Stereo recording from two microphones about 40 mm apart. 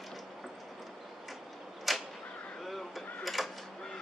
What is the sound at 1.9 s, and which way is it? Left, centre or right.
Arrow, centre.